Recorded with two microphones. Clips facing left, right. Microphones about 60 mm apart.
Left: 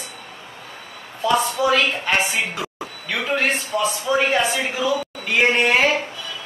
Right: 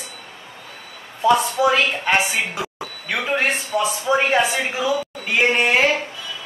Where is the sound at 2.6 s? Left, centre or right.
Right.